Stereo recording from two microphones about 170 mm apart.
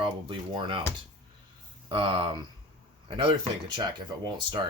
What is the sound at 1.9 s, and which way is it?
Speech, 30° right (ahead or behind).